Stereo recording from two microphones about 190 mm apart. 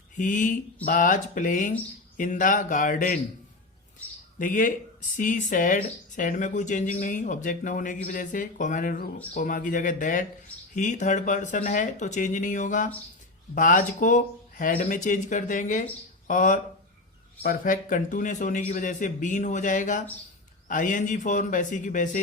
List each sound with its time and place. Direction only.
0.2 s a man's voice: 40° left (ahead or behind)
4.4 s a man's voice: 45° left (ahead or behind)